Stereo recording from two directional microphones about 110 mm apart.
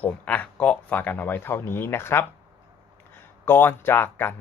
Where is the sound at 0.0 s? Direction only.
15° left (ahead or behind).